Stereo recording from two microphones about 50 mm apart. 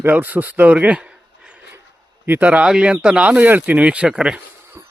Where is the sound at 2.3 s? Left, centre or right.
Right.